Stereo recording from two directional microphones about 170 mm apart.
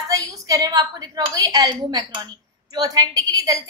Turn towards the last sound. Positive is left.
turn(degrees=-20)  # may be behind; listen again after turning